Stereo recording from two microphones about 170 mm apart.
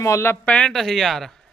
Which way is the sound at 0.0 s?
15° left (ahead or behind).